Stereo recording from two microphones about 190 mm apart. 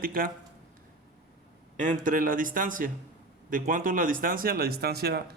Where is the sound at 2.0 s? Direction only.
45° right (ahead or behind).